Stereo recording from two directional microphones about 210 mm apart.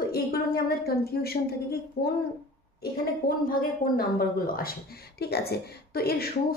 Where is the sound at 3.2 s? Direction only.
45° left (ahead or behind).